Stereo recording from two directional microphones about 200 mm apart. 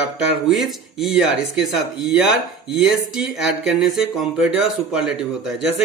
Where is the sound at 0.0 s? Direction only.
Centre (ahead or behind).